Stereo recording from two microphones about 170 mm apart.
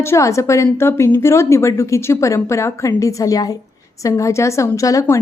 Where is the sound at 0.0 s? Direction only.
15° left (ahead or behind).